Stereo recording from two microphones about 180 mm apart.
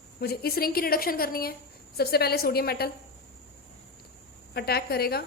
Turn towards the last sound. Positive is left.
turn(degrees=60)  # may be behind; listen again after turning